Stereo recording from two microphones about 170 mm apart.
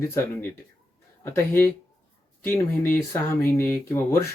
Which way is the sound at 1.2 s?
10° left (ahead or behind).